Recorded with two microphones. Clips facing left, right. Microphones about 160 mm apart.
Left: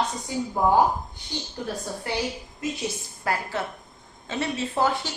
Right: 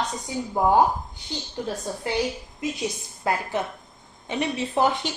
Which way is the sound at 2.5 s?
20° right (ahead or behind).